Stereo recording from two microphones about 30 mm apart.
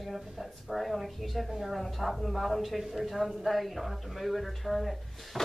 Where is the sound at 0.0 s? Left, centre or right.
Centre.